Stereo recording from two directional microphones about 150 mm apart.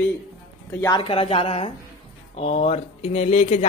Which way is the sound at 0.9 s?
35° left (ahead or behind).